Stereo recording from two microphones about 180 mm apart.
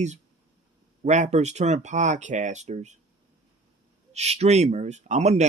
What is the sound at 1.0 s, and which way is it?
Speech, 40° right (ahead or behind).